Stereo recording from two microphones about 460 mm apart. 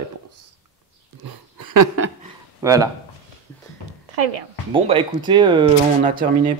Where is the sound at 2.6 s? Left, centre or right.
Centre.